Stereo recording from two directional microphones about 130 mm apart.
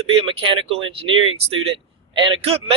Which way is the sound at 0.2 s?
40° right (ahead or behind).